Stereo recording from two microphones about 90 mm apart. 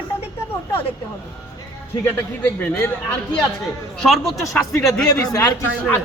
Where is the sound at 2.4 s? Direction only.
25° left (ahead or behind).